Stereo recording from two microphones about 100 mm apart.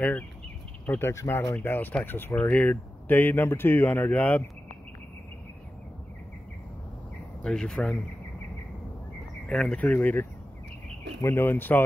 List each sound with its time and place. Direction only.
0.8 s speech: 25° left (ahead or behind)
7.4 s speech: 5° left (ahead or behind)
9.5 s speech: 10° left (ahead or behind)